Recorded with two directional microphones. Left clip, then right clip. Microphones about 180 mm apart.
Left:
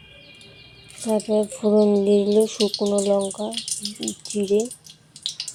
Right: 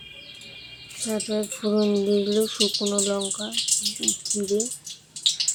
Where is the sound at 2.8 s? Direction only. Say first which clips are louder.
Left 5 dB; 15° right (ahead or behind).